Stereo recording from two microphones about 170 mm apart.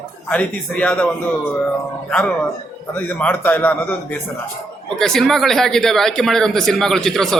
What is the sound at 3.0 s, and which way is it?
Speech, 10° left (ahead or behind).